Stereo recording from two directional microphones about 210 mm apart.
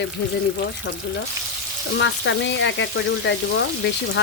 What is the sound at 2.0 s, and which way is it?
Frying, 60° left (ahead or behind).